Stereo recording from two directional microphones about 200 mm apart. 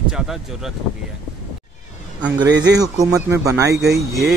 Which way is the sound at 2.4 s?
60° right (ahead or behind).